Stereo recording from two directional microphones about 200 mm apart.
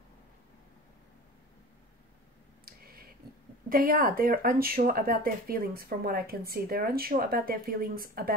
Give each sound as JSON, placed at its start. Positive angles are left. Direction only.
{"t": 3.6, "sound": "speech", "side_deg": -45}